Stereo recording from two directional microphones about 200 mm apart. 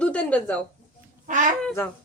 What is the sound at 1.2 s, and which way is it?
Speech, 40° right (ahead or behind).